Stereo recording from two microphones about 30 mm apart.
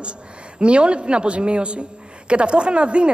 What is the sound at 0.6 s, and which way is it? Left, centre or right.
A man's voice, right.